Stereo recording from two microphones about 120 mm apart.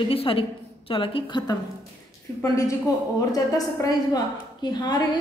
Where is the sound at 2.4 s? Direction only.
25° left (ahead or behind).